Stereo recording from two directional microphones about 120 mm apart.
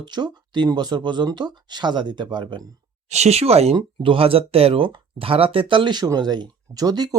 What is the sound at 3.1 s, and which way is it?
Speech, 65° right (ahead or behind).